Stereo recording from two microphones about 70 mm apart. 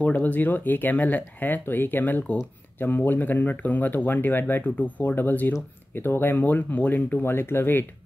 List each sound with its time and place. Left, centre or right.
0.0 s speech: left